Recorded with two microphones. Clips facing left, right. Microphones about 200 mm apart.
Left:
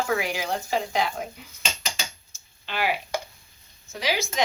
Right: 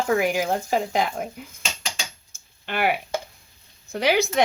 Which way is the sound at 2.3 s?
55° right (ahead or behind).